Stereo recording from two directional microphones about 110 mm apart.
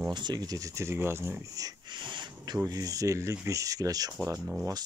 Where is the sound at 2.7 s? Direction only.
30° right (ahead or behind).